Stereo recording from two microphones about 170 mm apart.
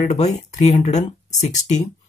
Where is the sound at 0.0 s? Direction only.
40° left (ahead or behind).